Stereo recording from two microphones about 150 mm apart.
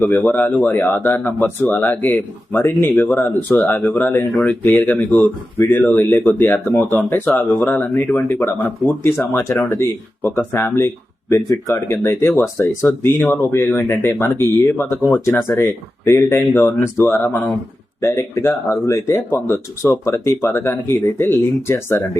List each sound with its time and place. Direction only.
0.1 s speech: 10° left (ahead or behind)